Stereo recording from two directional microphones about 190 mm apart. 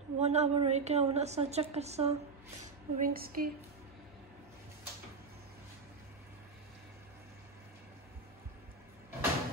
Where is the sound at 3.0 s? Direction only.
50° right (ahead or behind).